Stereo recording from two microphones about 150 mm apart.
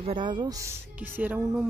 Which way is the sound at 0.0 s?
35° right (ahead or behind).